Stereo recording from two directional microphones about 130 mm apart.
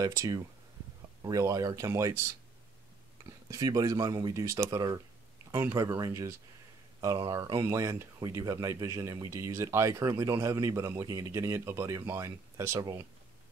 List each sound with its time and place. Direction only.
0.0 s speech: 25° right (ahead or behind)
3.3 s speech: 25° right (ahead or behind)
7.3 s speech: 25° right (ahead or behind)